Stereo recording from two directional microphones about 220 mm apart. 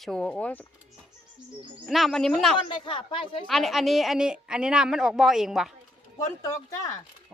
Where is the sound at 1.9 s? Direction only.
Centre (ahead or behind).